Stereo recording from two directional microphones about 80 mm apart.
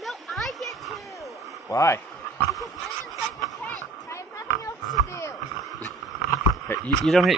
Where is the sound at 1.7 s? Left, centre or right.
Left.